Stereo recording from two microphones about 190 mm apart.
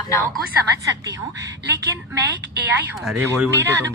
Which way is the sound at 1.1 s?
15° right (ahead or behind).